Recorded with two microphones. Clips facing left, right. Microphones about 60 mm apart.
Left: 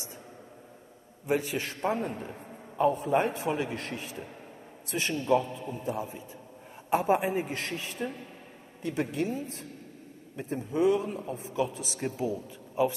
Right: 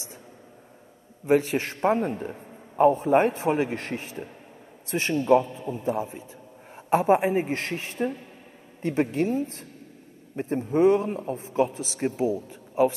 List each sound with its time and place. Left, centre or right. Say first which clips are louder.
1.2 s a man's voice: right 7 dB; right
5.9 s a man's voice: right 6 dB; right
9.1 s a man's voice: right 6 dB; right